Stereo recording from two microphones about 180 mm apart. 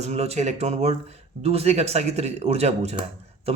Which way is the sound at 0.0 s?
35° right (ahead or behind).